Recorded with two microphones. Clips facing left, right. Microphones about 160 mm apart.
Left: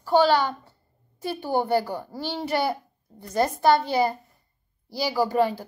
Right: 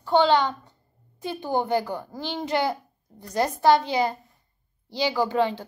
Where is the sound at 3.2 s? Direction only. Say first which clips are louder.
Left 1 dB; 15° right (ahead or behind).